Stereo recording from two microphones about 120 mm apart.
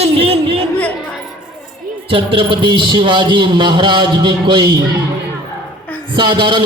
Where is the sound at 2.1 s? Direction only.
45° right (ahead or behind).